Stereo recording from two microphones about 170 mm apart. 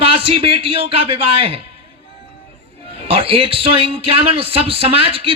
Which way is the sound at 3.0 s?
35° right (ahead or behind).